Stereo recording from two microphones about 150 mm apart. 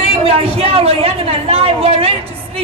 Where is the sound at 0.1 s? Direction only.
40° right (ahead or behind).